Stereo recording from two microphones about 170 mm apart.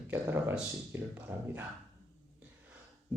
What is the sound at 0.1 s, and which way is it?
Speech, 10° right (ahead or behind).